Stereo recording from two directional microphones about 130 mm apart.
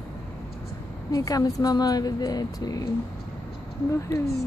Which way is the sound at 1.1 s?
25° left (ahead or behind).